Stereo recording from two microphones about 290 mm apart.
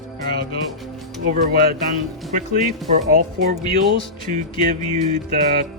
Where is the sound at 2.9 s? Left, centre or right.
Right.